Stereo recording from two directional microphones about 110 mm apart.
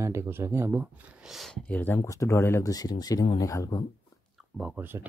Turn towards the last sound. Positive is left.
turn(degrees=-30)  # may be behind; listen again after turning